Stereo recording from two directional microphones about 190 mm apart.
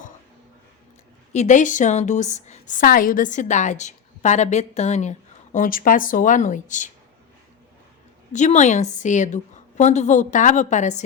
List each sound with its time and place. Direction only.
1.3 s a woman's voice: 40° left (ahead or behind)
8.3 s a woman's voice: 40° left (ahead or behind)